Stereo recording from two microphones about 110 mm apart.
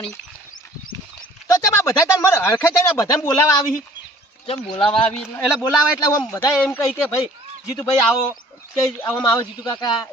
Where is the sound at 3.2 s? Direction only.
30° left (ahead or behind).